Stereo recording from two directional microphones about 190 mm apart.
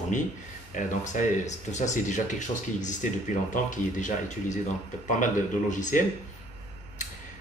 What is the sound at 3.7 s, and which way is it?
Speech, 40° left (ahead or behind).